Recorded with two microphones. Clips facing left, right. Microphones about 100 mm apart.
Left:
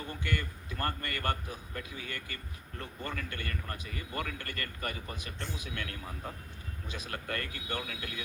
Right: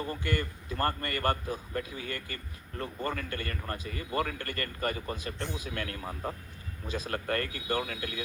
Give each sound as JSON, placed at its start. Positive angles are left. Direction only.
{"t": 0.0, "sound": "a man's voice", "side_deg": -35}